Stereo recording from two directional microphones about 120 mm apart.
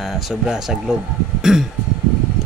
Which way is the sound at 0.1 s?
5° right (ahead or behind).